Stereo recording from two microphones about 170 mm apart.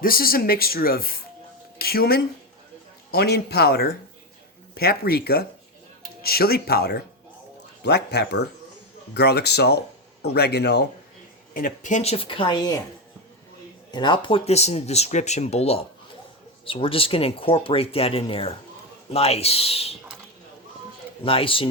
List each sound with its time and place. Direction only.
0.0 s speech: 60° left (ahead or behind)
11.5 s speech: 50° left (ahead or behind); by 12.8 s 25° left (ahead or behind)
13.9 s speech: 25° left (ahead or behind)
21.2 s speech: 30° left (ahead or behind)